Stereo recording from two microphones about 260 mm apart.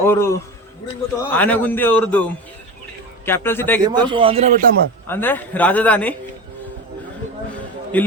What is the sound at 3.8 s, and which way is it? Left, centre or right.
Speech, centre.